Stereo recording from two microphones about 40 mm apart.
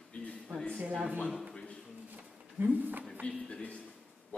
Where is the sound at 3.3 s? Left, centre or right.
Left.